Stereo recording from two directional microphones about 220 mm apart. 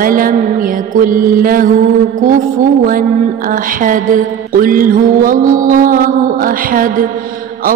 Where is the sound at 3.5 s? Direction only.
40° right (ahead or behind).